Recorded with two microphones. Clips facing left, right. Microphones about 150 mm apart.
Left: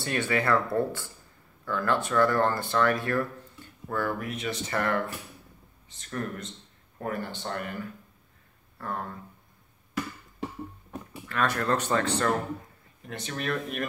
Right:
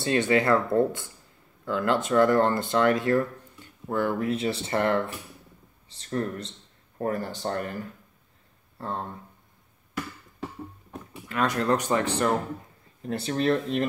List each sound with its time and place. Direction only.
0.0 s speech: 20° right (ahead or behind); by 7.8 s 35° right (ahead or behind)
8.7 s speech: 25° right (ahead or behind)
11.2 s speech: 20° right (ahead or behind)
13.0 s speech: 35° right (ahead or behind)